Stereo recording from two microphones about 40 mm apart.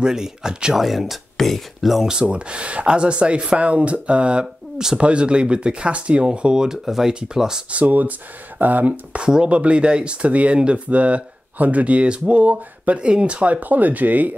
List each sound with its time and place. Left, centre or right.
0.0 s speech: centre
0.7 s speech: centre
2.2 s speech: right
4.7 s speech: centre
5.0 s speech: right
7.8 s speech: right
9.1 s speech: right
13.0 s speech: right